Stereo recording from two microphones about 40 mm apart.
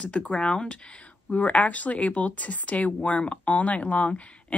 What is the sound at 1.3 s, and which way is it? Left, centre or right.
Speech, left.